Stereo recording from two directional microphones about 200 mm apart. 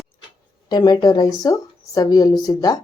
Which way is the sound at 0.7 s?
20° left (ahead or behind).